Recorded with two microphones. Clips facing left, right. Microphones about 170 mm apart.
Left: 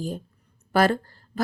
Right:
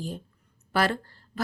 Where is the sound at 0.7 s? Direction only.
45° left (ahead or behind).